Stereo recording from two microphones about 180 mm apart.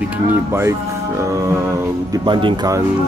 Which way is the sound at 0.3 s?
15° right (ahead or behind).